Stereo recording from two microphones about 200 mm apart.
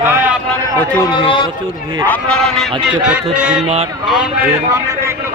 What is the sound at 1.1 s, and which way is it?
Speech, 25° left (ahead or behind).